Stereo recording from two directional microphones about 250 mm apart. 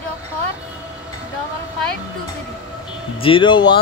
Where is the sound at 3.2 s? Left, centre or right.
Centre.